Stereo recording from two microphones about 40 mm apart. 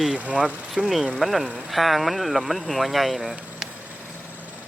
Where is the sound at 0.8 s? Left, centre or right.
Centre.